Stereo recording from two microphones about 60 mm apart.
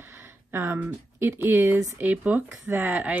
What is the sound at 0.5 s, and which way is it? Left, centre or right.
A woman's voice, right.